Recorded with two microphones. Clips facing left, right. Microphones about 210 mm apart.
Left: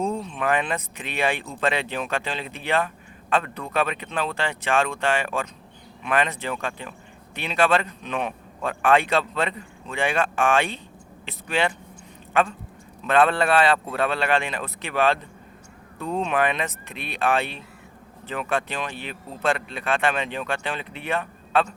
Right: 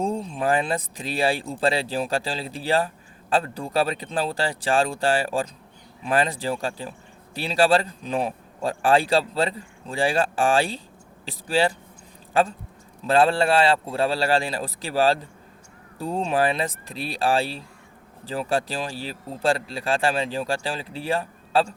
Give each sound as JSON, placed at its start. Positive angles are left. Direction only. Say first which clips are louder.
{"t": 0.0, "sound": "speech", "louder": "right 1 dB", "side_deg": -30}